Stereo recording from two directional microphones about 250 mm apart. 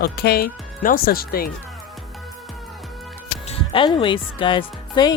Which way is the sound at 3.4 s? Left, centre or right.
Left.